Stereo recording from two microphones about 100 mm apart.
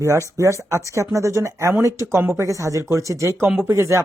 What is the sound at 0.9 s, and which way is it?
Speech, 30° right (ahead or behind).